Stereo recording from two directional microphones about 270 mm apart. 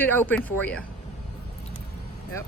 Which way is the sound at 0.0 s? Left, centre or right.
Centre.